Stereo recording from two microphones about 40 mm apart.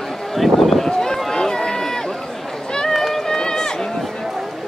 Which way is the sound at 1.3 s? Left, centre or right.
Centre.